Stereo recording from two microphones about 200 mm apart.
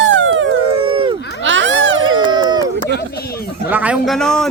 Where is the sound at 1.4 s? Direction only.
70° right (ahead or behind).